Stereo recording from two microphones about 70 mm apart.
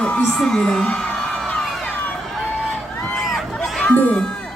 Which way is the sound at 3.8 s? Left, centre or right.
Left.